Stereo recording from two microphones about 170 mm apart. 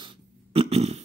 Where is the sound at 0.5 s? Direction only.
35° right (ahead or behind).